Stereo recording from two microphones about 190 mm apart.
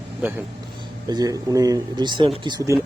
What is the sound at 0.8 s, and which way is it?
Speech, 20° right (ahead or behind).